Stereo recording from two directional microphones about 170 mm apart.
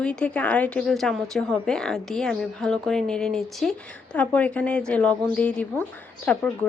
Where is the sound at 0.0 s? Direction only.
5° left (ahead or behind).